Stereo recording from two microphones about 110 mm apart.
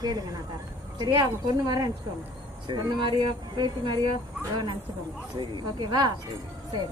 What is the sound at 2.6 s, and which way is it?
Speech, 50° right (ahead or behind).